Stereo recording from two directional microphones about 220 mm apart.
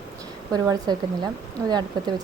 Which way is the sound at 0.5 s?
15° right (ahead or behind).